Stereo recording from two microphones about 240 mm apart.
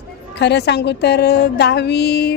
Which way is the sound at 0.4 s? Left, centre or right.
Left.